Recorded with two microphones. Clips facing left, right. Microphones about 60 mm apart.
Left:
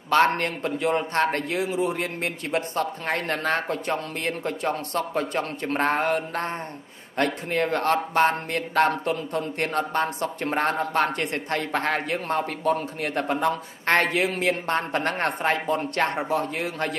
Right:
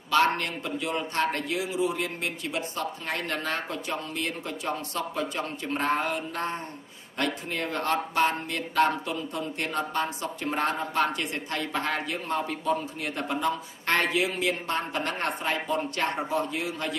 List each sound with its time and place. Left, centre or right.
0.4 s speech: left